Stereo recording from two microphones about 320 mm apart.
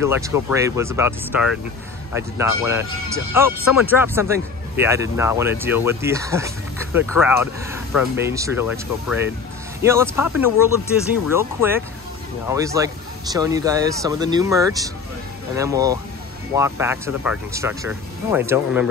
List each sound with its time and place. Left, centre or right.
0.0 s speech: centre